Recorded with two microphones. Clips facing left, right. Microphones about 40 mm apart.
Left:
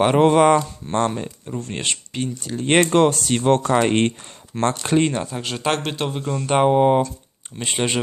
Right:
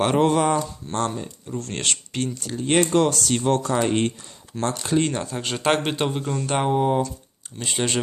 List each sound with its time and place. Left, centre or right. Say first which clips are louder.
0.0 s speech: left 5 dB; left
1.5 s speech: even; centre
2.6 s speech: left 3 dB; left
4.9 s speech: left 2 dB; left
5.4 s a man's voice: right 3 dB; centre
6.2 s speech: left 5 dB; centre
6.7 s speech: left 5 dB; left